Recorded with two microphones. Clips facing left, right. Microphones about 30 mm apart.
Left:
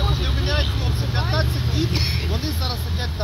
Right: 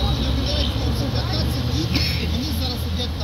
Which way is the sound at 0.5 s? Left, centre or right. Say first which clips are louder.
Right 1 dB; centre.